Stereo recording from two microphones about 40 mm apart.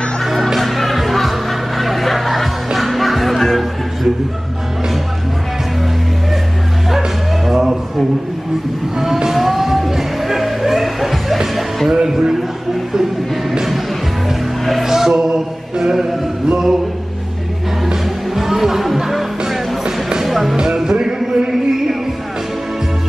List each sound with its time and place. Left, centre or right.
0.2 s music: centre
7.4 s a sound: centre
8.9 s music: centre
11.9 s a sound: centre
14.6 s music: centre
14.9 s chant: centre
17.8 s music: centre
19.8 s music: centre
20.2 s music: centre
20.5 s music: centre